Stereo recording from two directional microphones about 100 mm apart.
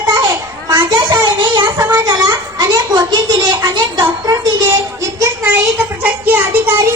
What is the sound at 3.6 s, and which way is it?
Music, 40° right (ahead or behind).